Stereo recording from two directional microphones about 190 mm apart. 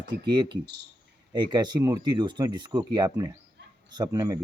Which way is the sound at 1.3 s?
25° right (ahead or behind).